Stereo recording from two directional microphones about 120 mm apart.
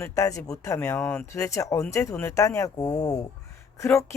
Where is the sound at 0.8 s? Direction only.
15° left (ahead or behind).